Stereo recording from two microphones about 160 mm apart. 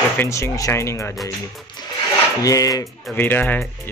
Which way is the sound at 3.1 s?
10° left (ahead or behind).